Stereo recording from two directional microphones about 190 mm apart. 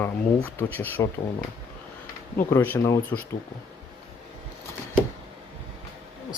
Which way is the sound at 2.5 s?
10° left (ahead or behind).